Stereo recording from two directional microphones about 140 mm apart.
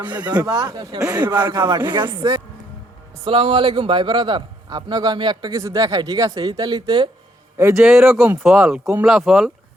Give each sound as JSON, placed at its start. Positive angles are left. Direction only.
{"t": 0.2, "sound": "a man's voice", "side_deg": -30}
{"t": 3.2, "sound": "a man's voice", "side_deg": -40}
{"t": 7.8, "sound": "speech", "side_deg": -5}
{"t": 8.0, "sound": "speech", "side_deg": -15}
{"t": 8.4, "sound": "speech", "side_deg": -5}